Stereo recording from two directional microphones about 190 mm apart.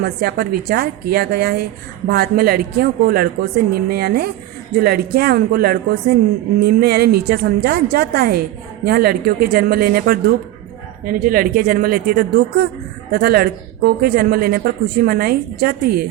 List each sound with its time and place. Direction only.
0.0 s a woman's voice: 55° right (ahead or behind)